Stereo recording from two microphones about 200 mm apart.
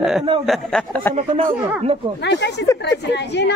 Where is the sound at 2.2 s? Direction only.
60° left (ahead or behind).